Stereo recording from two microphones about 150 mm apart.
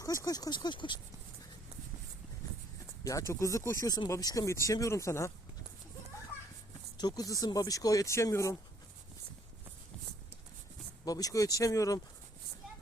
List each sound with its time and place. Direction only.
0.0 s speech: 20° left (ahead or behind)
3.0 s speech: 20° left (ahead or behind)
6.9 s speech: 25° left (ahead or behind)
11.0 s speech: 25° left (ahead or behind)